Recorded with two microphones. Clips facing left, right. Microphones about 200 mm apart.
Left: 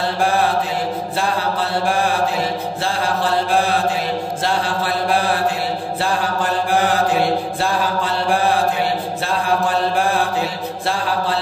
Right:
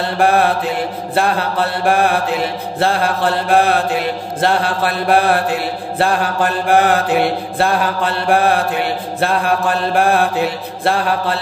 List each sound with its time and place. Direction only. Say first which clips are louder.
0.2 s mantra: right 5 dB; 60° right (ahead or behind)